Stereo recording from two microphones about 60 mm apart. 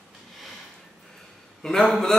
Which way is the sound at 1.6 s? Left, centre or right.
Centre.